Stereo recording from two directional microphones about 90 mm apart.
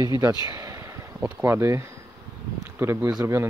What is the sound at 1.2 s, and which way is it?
Speech, 25° right (ahead or behind).